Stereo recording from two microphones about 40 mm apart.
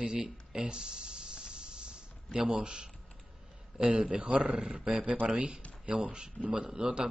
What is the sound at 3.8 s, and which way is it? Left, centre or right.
Speech, right.